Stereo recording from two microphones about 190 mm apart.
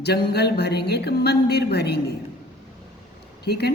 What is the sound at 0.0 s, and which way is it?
Speech, 60° left (ahead or behind).